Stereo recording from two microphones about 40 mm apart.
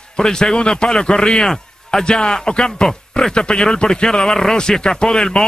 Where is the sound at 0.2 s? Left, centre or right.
Centre.